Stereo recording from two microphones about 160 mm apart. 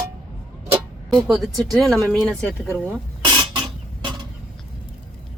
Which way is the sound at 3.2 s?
30° right (ahead or behind).